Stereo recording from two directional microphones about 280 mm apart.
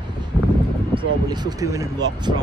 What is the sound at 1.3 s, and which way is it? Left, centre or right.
Speech, centre.